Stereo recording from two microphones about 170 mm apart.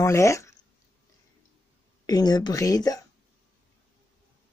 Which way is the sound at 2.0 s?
25° left (ahead or behind).